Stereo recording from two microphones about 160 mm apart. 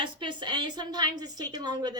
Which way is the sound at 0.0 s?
30° right (ahead or behind).